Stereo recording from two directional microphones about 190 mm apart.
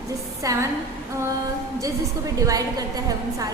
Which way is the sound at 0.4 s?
15° right (ahead or behind).